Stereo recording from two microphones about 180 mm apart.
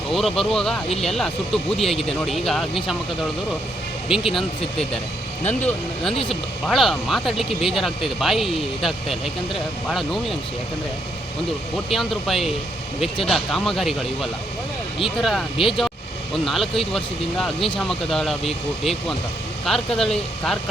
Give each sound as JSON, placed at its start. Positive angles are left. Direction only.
{"t": 0.1, "sound": "speech", "side_deg": 0}
{"t": 4.1, "sound": "speech", "side_deg": 0}
{"t": 5.5, "sound": "speech", "side_deg": 5}
{"t": 11.9, "sound": "speech", "side_deg": 0}